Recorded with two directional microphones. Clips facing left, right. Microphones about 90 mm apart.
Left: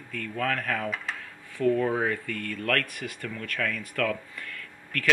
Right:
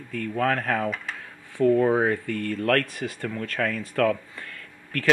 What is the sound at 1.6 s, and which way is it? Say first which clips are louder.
Speech: right 5 dB; 30° right (ahead or behind).